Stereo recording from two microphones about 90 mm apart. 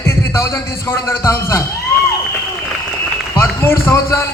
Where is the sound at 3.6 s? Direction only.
30° left (ahead or behind).